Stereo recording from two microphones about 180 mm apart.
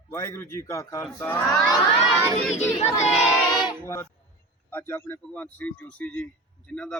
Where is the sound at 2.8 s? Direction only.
40° left (ahead or behind).